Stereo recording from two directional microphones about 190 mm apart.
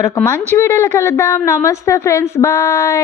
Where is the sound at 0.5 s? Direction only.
15° left (ahead or behind).